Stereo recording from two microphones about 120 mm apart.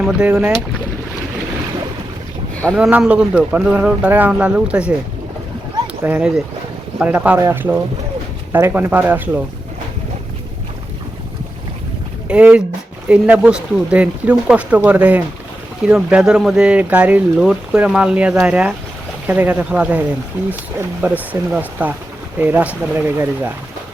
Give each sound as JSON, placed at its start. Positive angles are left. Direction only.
{"t": 0.0, "sound": "speech", "side_deg": -10}
{"t": 2.7, "sound": "speech", "side_deg": -5}
{"t": 6.0, "sound": "speech", "side_deg": -10}
{"t": 12.3, "sound": "speech", "side_deg": -10}